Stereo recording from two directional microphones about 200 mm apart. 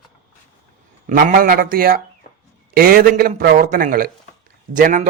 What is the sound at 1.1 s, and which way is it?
A man's voice, 40° right (ahead or behind).